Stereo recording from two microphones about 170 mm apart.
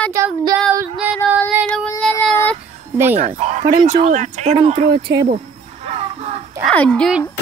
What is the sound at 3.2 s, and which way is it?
Speech, 40° right (ahead or behind).